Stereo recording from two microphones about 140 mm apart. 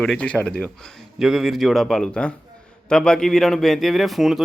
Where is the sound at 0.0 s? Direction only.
5° left (ahead or behind).